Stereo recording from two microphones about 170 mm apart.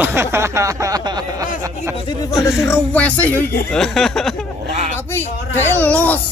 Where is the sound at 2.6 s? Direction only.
10° left (ahead or behind).